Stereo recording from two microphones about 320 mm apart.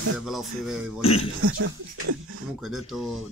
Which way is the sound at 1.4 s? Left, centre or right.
Right.